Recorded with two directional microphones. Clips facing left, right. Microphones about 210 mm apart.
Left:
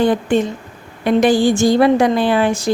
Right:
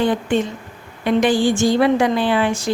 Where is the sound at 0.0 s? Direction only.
40° left (ahead or behind).